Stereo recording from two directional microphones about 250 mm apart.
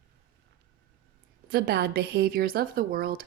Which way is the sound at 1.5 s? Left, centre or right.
Right.